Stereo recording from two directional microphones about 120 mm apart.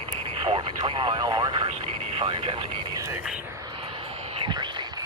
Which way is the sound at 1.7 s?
55° right (ahead or behind).